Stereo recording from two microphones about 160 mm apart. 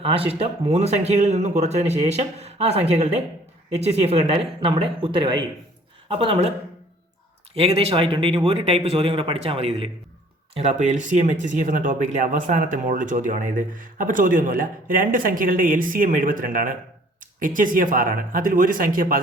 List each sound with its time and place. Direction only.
0.0 s speech: 35° right (ahead or behind)
7.5 s speech: 40° right (ahead or behind); by 19.2 s 60° right (ahead or behind)